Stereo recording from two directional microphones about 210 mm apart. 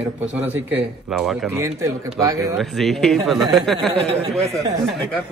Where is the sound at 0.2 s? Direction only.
5° right (ahead or behind).